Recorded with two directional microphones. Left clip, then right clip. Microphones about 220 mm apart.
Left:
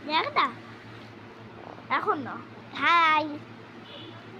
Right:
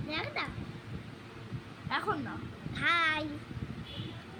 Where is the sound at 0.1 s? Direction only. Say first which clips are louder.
Left 11 dB; 5° right (ahead or behind).